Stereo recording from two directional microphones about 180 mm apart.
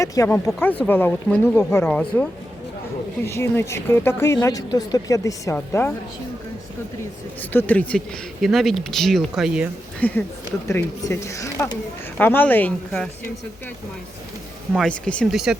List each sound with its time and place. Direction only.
0.0 s a woman's voice: 20° left (ahead or behind)
3.2 s a woman's voice: 15° left (ahead or behind)
7.5 s speech: 10° left (ahead or behind)
10.0 s a woman's voice: 10° left (ahead or behind)
14.7 s speech: 5° left (ahead or behind)